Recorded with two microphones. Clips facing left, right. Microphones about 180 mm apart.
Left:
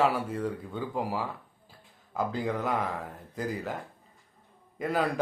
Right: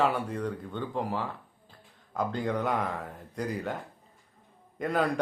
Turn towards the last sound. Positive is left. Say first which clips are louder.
# right 1 dB
turn(degrees=0)  # may be behind; listen again after turning